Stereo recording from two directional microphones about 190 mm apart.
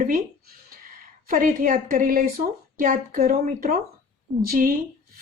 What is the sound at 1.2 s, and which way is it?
Speech, 45° right (ahead or behind).